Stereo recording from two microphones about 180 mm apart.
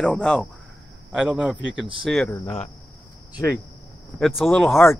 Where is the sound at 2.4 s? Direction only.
35° left (ahead or behind).